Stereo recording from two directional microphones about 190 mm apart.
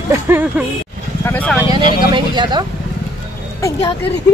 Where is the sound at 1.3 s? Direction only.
10° left (ahead or behind).